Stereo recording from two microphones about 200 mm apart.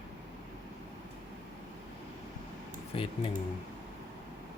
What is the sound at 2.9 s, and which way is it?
Speech, 30° left (ahead or behind).